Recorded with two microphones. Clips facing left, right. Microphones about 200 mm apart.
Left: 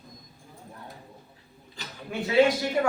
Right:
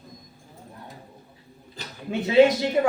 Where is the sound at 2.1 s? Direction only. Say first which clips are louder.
Right 4 dB; 20° right (ahead or behind).